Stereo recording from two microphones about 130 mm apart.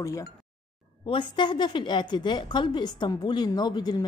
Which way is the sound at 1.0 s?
40° left (ahead or behind).